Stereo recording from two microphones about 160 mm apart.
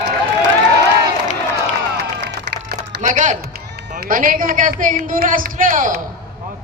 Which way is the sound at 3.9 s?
65° right (ahead or behind).